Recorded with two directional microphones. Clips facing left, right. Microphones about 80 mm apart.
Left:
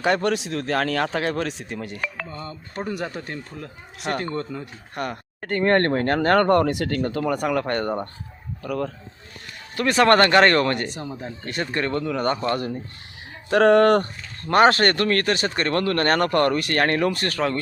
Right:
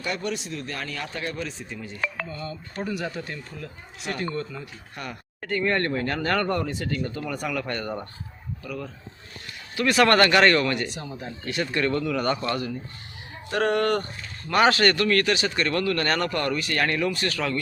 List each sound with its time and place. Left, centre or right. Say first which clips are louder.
0.0 s a man's voice: left 8 dB; left
2.3 s speech: left 1 dB; left
9.7 s speech: left 2 dB; left
12.5 s speech: left 2 dB; left
13.5 s speech: left 8 dB; left
14.4 s speech: left 3 dB; left